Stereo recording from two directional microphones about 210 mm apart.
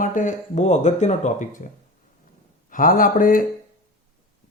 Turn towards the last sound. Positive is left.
turn(degrees=40)  # may be behind; listen again after turning